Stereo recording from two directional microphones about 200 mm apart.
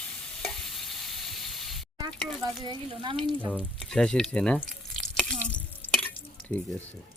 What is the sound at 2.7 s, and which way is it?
Speech, 25° right (ahead or behind).